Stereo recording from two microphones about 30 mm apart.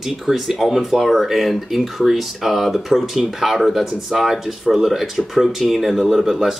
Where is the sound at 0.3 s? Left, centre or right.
Right.